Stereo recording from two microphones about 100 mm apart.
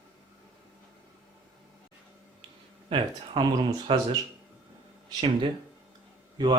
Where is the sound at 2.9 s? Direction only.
60° right (ahead or behind).